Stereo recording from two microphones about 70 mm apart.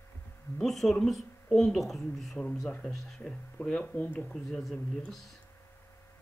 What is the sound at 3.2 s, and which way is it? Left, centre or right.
Speech, centre.